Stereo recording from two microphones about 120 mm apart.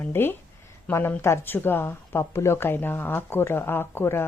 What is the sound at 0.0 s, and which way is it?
A woman's voice, 20° left (ahead or behind).